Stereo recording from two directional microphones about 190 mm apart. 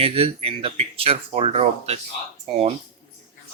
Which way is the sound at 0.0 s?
30° right (ahead or behind).